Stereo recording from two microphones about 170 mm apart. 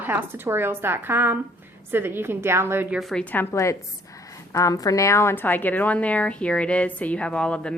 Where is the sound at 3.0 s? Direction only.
5° left (ahead or behind).